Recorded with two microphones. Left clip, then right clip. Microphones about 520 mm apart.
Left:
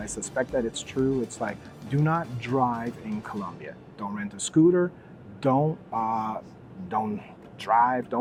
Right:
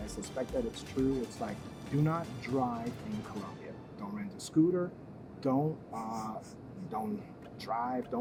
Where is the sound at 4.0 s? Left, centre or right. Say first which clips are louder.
Left 11 dB; left.